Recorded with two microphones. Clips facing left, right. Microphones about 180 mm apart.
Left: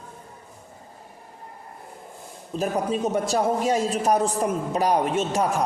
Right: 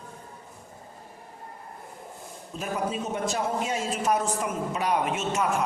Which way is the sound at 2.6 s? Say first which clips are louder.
Left 6 dB; 40° left (ahead or behind).